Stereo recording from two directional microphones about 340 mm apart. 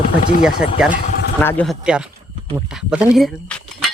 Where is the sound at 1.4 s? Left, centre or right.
Centre.